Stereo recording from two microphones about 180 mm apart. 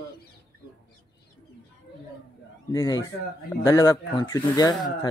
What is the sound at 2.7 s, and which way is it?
Speech, 20° left (ahead or behind).